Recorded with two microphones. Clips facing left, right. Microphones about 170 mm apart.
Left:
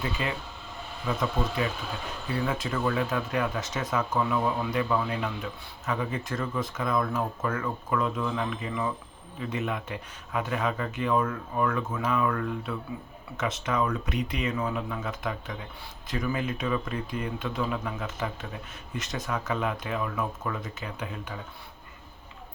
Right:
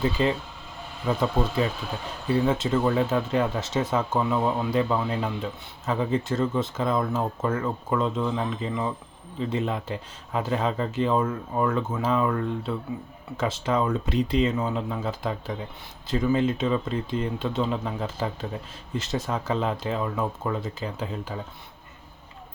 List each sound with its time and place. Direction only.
0.0 s speech: 30° right (ahead or behind)